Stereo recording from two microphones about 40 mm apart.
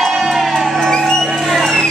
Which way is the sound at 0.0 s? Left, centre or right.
Centre.